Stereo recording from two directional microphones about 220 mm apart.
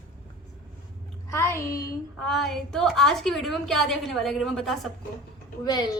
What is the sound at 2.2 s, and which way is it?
A woman's voice, centre (ahead or behind).